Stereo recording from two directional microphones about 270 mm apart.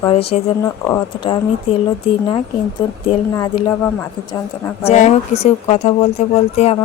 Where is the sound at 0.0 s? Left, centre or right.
Left.